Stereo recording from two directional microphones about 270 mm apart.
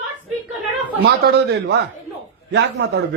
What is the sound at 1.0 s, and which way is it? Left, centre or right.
A woman's voice, right.